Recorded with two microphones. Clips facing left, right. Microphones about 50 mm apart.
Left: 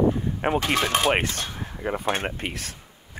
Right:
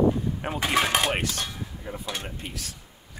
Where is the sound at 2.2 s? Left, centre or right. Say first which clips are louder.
Left 7 dB; left.